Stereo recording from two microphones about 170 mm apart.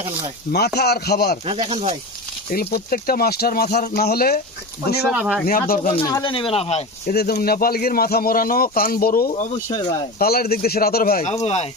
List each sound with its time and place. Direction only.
0.5 s speech: 70° left (ahead or behind)
1.7 s speech: 35° right (ahead or behind)
2.5 s speech: 60° left (ahead or behind)
5.1 s speech: 5° right (ahead or behind)
5.5 s speech: 60° left (ahead or behind)
6.0 s speech: 25° left (ahead or behind)
7.1 s speech: 70° left (ahead or behind)
9.3 s speech: 40° left (ahead or behind)
10.2 s speech: 65° left (ahead or behind)
11.2 s speech: 40° left (ahead or behind)